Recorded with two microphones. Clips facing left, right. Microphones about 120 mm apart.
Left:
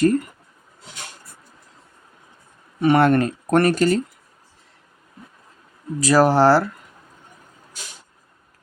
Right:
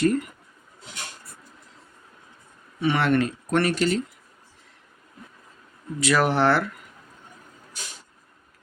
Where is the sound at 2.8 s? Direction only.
45° left (ahead or behind).